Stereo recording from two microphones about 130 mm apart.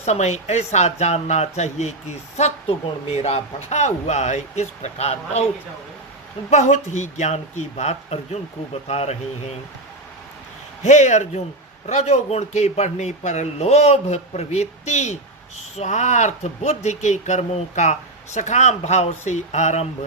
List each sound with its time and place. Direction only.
0.0 s speech: 60° left (ahead or behind)
6.5 s speech: 65° left (ahead or behind)
10.8 s speech: 65° left (ahead or behind)